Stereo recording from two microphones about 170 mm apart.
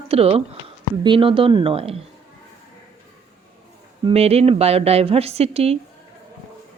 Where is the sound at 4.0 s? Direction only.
35° right (ahead or behind).